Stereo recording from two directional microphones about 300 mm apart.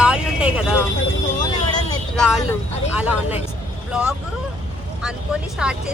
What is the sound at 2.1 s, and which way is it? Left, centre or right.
Speech, centre.